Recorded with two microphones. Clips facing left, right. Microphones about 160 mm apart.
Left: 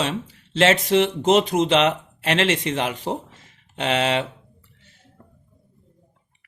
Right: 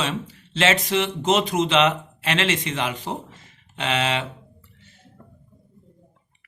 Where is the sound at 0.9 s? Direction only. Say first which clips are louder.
Left 4 dB; 60° left (ahead or behind).